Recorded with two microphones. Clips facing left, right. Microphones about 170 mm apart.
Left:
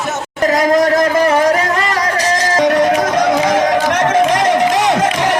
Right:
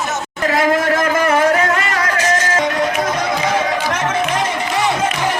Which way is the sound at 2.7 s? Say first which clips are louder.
Left 6 dB; 80° left.